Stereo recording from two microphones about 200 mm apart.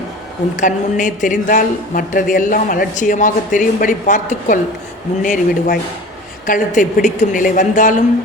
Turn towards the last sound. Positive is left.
turn(degrees=40)  # may be behind; listen again after turning